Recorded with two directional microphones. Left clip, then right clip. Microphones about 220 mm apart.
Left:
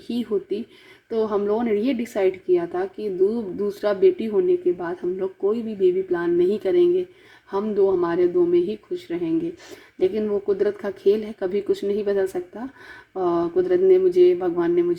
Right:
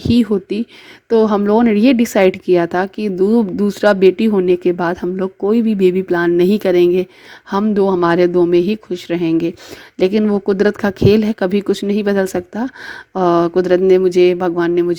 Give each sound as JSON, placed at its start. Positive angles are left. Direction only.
{"t": 0.1, "sound": "a woman's voice", "side_deg": -40}